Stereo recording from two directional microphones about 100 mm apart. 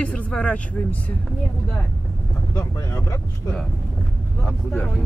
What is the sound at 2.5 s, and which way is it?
Speech, 30° left (ahead or behind).